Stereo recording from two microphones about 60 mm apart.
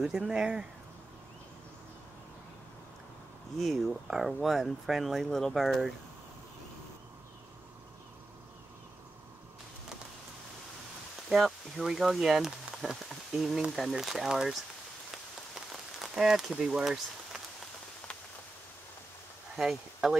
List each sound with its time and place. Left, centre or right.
0.3 s speech: centre
3.5 s speech: centre
11.2 s speech: centre
15.0 s rain on surface: centre
19.5 s speech: centre